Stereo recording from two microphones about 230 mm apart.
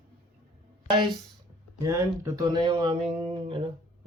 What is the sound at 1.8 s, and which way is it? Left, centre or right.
Speech, centre.